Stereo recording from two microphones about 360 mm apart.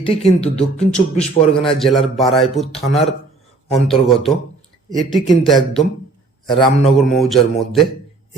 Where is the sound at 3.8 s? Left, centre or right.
Centre.